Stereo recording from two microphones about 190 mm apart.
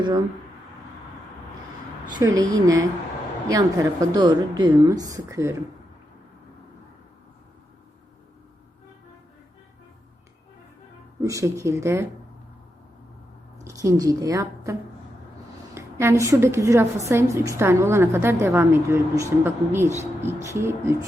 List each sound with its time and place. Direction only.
2.1 s a woman's voice: 20° right (ahead or behind)
11.2 s a woman's voice: 15° right (ahead or behind)
13.7 s a woman's voice: 15° right (ahead or behind)